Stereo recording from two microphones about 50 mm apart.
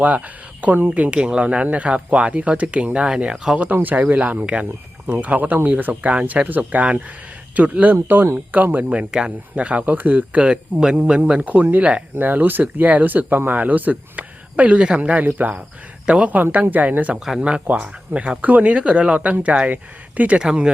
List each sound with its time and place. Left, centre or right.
0.0 s speech: right; by 3.6 s centre
3.9 s speech: right
8.0 s speech: right
8.9 s speech: right
10.5 s speech: centre
10.9 s speech: right
12.2 s speech: right
15.2 s speech: right
16.0 s speech: centre
16.3 s speech: right
17.2 s speech: centre
17.4 s speech: right
20.4 s speech: centre